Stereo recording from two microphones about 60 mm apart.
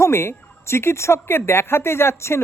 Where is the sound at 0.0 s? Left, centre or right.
Left.